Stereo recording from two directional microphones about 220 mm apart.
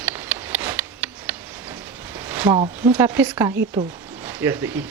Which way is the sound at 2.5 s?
25° right (ahead or behind).